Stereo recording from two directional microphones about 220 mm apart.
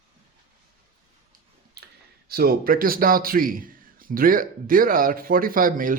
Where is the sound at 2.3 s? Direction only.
45° right (ahead or behind).